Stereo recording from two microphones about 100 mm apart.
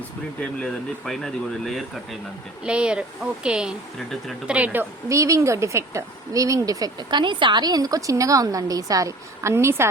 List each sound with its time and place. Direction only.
0.3 s speech: 10° left (ahead or behind)
2.6 s speech: 10° right (ahead or behind)
5.0 s speech: 30° right (ahead or behind)